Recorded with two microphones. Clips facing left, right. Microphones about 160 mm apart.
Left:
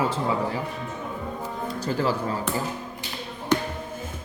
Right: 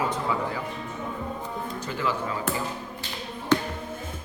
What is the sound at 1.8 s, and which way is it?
Speech, 35° left (ahead or behind).